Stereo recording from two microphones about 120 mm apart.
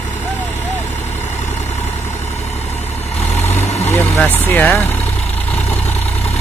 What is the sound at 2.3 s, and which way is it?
Vehicle, 65° left (ahead or behind).